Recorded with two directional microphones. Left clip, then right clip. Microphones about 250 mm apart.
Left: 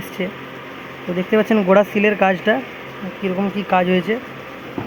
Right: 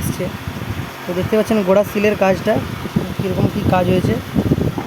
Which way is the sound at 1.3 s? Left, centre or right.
Centre.